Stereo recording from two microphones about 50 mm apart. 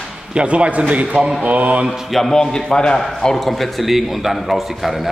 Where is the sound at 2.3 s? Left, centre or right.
Centre.